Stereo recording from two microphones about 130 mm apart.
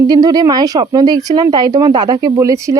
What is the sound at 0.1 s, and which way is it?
Speech, 30° right (ahead or behind).